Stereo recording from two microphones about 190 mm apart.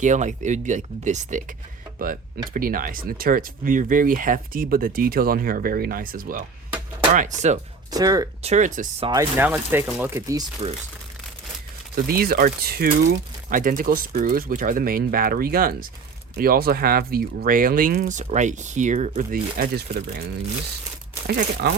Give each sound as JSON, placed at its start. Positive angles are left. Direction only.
{"t": 0.0, "sound": "speech", "side_deg": -40}
{"t": 2.5, "sound": "speech", "side_deg": -50}
{"t": 7.9, "sound": "speech", "side_deg": -20}
{"t": 8.4, "sound": "speech", "side_deg": -35}
{"t": 9.4, "sound": "speech", "side_deg": -10}
{"t": 12.0, "sound": "speech", "side_deg": -55}